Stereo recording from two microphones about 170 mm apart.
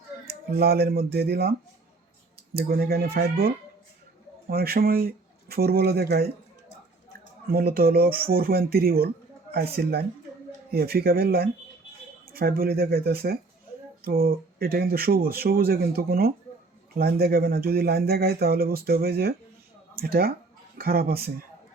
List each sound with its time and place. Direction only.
0.5 s speech: 65° right (ahead or behind)
2.6 s speech: 60° right (ahead or behind)
7.5 s speech: 60° right (ahead or behind)